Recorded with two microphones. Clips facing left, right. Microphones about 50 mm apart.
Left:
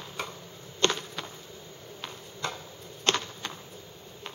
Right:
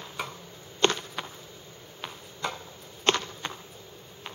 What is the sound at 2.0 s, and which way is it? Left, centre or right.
Tick-tock, centre.